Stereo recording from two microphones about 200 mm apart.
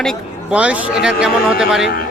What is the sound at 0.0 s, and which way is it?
A man's voice, centre (ahead or behind).